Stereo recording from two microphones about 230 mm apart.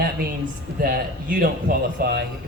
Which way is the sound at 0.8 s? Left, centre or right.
Right.